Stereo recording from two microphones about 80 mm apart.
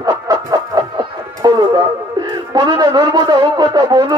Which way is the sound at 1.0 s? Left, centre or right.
Right.